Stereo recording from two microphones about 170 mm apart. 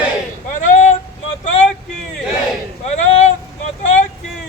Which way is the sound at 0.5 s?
45° left (ahead or behind).